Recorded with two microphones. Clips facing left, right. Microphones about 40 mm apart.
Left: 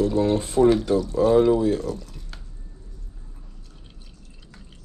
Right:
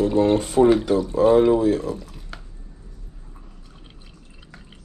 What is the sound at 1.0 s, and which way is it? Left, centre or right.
Speech, right.